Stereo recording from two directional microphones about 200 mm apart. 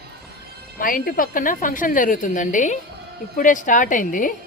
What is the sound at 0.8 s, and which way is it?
A woman's voice, 45° left (ahead or behind).